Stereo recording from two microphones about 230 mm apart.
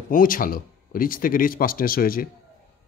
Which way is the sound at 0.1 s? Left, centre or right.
Left.